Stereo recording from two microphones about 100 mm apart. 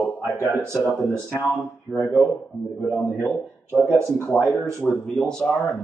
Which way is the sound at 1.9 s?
5° right (ahead or behind).